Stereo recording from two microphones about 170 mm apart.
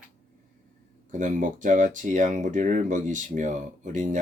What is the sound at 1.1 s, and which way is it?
Speech, 50° right (ahead or behind).